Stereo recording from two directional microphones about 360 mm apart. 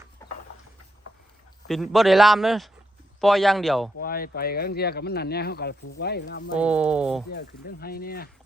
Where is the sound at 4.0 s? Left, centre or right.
Left.